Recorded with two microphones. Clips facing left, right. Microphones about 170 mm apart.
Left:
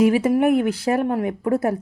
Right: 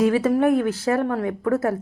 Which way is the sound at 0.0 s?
15° left (ahead or behind).